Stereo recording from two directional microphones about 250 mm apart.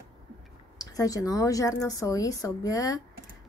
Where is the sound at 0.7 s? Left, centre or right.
Centre.